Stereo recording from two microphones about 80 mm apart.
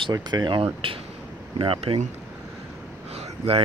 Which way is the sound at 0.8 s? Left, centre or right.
Right.